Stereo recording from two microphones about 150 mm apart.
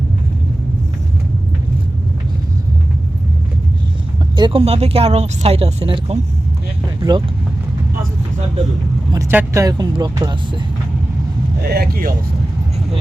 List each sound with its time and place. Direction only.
4.4 s speech: 35° right (ahead or behind)
9.3 s speech: 15° right (ahead or behind)
11.6 s speech: 90° right